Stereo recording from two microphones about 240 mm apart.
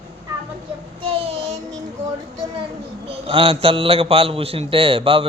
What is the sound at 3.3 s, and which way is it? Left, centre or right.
A man's voice, right.